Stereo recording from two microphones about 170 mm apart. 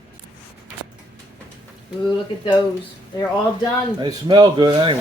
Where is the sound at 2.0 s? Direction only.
25° left (ahead or behind).